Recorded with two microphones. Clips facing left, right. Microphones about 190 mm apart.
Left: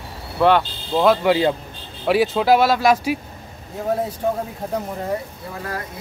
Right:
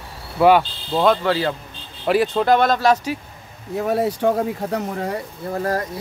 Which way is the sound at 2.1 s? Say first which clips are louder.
Left 1 dB; 5° left (ahead or behind).